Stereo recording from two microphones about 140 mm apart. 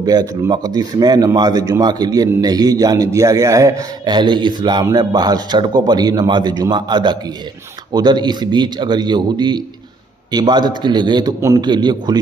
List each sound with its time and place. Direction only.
0.0 s a man's voice: 25° right (ahead or behind)